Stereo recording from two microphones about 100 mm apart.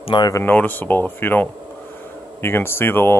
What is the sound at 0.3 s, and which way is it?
Speech, 20° left (ahead or behind).